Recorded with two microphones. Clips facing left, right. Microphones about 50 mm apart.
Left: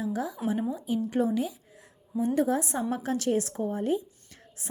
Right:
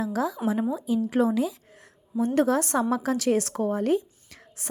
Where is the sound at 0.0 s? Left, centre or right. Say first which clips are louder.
Right 4 dB; right.